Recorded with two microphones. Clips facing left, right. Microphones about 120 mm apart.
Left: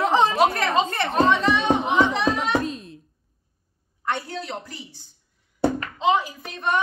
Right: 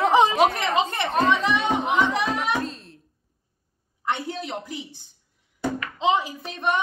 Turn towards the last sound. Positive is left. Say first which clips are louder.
# right 1 dB
turn(degrees=-20)  # may be behind; listen again after turning